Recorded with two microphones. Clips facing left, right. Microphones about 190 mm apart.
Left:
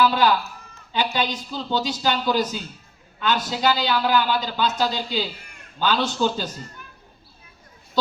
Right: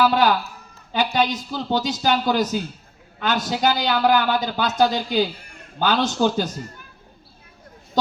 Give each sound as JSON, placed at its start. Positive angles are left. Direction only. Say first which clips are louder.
{"t": 0.0, "sound": "a man's voice", "louder": "right 1 dB", "side_deg": -50}